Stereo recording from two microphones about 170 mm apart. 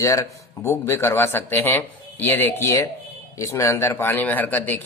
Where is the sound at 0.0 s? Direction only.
20° left (ahead or behind).